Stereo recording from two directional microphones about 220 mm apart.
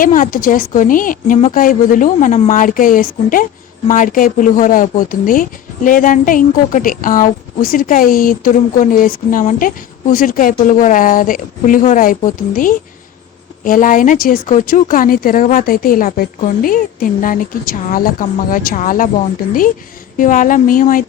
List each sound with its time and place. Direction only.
0.0 s speech: 40° left (ahead or behind)
20.1 s speech: 35° left (ahead or behind)